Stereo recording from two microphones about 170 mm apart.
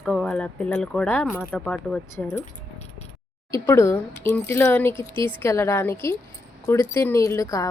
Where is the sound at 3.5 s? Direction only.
15° left (ahead or behind).